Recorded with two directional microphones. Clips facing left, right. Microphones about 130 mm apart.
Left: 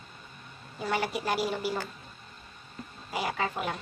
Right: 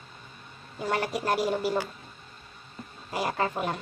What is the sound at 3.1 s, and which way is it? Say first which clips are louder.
Speech: right 3 dB; 40° right (ahead or behind).